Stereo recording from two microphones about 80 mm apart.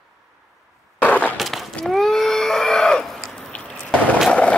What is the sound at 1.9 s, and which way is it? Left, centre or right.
Screaming, centre.